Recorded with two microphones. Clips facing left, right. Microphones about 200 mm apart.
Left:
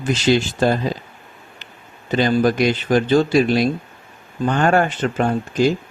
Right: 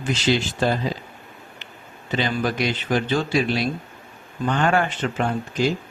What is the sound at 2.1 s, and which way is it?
Speech, 45° left (ahead or behind).